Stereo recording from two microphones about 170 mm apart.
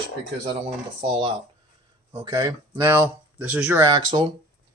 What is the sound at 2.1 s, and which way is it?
Speech, 20° right (ahead or behind).